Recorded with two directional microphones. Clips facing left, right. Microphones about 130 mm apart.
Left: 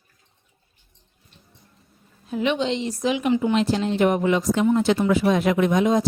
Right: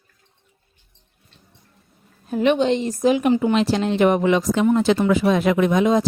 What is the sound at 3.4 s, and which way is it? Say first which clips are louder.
Speech: right 2 dB; 80° right.